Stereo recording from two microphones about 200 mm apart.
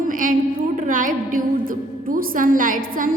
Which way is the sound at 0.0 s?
45° right (ahead or behind).